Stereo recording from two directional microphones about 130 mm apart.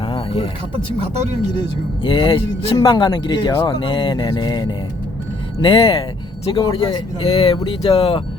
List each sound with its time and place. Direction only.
0.0 s music: 40° left (ahead or behind)
2.0 s speech: 40° left (ahead or behind)
5.6 s speech: 40° left (ahead or behind)